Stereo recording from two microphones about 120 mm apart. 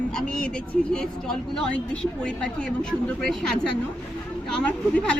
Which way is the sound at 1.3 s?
5° left (ahead or behind).